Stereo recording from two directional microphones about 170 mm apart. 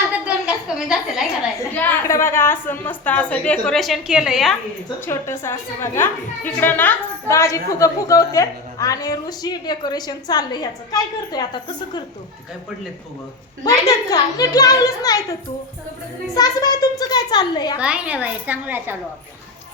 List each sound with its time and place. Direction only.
0.1 s a sound: 5° right (ahead or behind)
1.7 s a woman's voice: 10° left (ahead or behind)
5.0 s a woman's voice: 15° left (ahead or behind)
13.7 s a woman's voice: 20° left (ahead or behind)
17.7 s a woman's voice: 5° right (ahead or behind)